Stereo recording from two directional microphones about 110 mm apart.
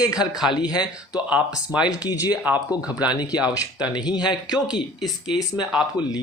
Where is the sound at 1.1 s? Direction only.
10° right (ahead or behind).